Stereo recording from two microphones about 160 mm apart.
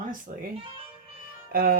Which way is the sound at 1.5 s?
70° right (ahead or behind).